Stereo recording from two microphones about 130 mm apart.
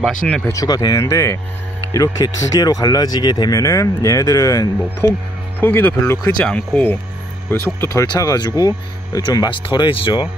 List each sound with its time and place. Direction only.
0.5 s speech: 30° left (ahead or behind)